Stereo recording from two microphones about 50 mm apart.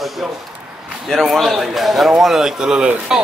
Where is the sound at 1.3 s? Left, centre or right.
Centre.